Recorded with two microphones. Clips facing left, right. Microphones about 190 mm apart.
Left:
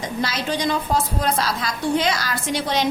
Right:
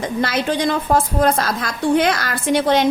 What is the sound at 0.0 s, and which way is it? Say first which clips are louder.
A woman's voice: right 5 dB; 55° right (ahead or behind).